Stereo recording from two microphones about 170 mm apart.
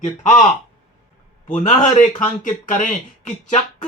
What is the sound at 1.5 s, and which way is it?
Speech, 45° left (ahead or behind).